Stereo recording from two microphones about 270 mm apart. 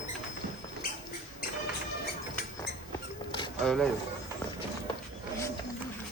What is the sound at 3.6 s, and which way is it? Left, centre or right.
Speech, centre.